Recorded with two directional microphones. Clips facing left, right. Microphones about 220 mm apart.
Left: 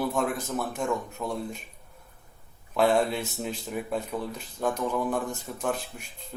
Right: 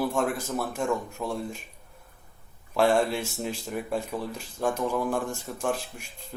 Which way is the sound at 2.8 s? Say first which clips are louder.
Even; centre (ahead or behind).